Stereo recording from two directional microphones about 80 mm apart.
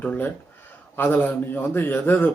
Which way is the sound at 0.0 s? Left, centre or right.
Centre.